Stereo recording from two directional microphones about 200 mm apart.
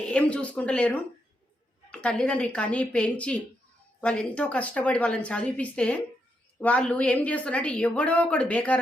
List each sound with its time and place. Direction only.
0.0 s a woman's voice: 5° left (ahead or behind)